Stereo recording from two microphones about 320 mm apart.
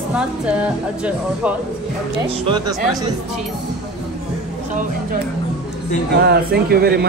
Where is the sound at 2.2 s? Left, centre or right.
Centre.